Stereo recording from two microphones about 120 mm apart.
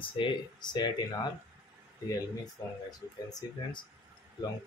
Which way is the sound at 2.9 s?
35° left (ahead or behind).